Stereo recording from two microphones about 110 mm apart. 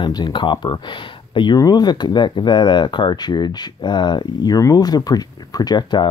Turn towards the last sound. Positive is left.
turn(degrees=40)  # may be behind; listen again after turning